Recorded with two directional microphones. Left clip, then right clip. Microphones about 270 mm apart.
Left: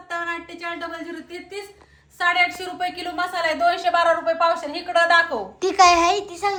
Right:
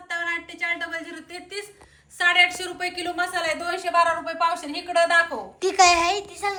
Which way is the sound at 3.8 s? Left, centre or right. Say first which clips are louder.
Left 3 dB; left.